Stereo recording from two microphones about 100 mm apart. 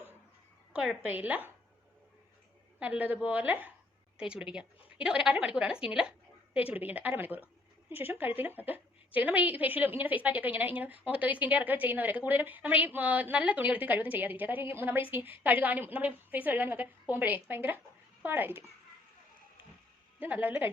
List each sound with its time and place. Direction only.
0.7 s a woman's voice: 5° right (ahead or behind)
1.0 s a woman's voice: 15° right (ahead or behind)
2.7 s a woman's voice: 15° right (ahead or behind)
20.1 s a woman's voice: 20° right (ahead or behind)